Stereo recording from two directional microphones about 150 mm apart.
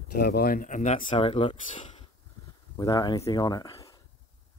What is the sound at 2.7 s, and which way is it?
Speech, 25° left (ahead or behind).